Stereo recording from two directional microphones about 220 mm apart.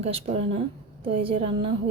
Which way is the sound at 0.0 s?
25° right (ahead or behind).